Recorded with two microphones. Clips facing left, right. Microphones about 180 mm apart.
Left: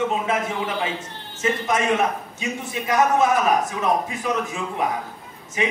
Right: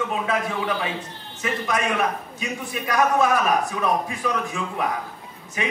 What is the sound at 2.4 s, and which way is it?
A man's voice, 20° left (ahead or behind).